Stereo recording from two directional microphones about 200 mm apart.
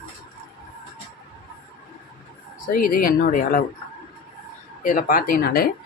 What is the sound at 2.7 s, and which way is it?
Speech, 45° left (ahead or behind).